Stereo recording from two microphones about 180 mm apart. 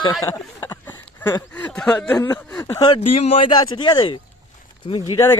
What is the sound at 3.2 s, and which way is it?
Speech, 30° left (ahead or behind).